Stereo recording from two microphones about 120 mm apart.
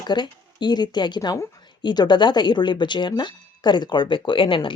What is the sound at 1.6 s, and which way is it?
Speech, 40° left (ahead or behind).